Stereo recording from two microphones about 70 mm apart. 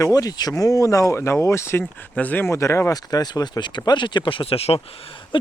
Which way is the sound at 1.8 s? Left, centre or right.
Left.